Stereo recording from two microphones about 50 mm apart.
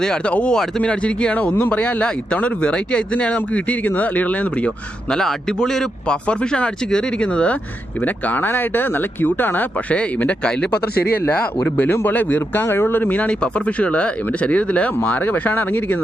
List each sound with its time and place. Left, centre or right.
0.3 s a man's voice: left
5.0 s a man's voice: centre
8.0 s speech: left
10.4 s a man's voice: centre; by 12.6 s left
12.6 s speech: left
13.2 s a man's voice: left